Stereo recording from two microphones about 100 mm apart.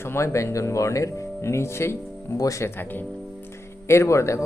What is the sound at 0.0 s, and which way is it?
Speech, 25° left (ahead or behind).